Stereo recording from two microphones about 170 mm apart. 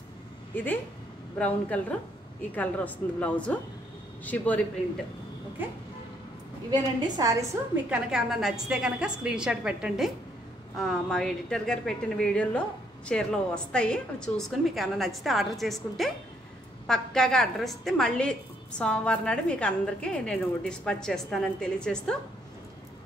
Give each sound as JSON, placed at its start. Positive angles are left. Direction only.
{"t": 1.4, "sound": "a woman's voice", "side_deg": 10}
{"t": 6.7, "sound": "a woman's voice", "side_deg": -20}
{"t": 7.7, "sound": "a woman's voice", "side_deg": -5}